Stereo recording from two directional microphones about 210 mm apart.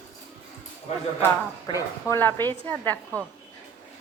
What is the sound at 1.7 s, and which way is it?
Speech, 20° left (ahead or behind).